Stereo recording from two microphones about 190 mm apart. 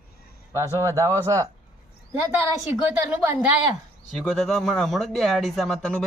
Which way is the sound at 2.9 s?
10° right (ahead or behind).